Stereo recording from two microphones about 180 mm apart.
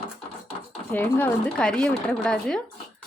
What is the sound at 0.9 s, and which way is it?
Speech, 10° left (ahead or behind).